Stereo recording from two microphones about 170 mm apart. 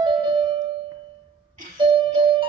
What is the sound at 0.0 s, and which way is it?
Keyboard, 25° right (ahead or behind).